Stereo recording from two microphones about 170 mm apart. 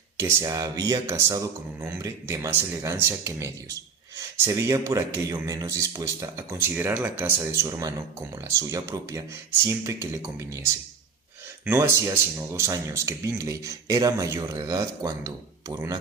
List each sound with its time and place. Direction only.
0.2 s speech: 15° right (ahead or behind)